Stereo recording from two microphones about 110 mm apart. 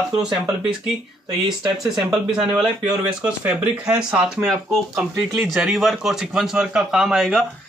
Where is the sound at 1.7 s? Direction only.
5° right (ahead or behind).